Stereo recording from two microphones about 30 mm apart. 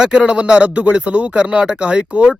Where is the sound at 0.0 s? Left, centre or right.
Right.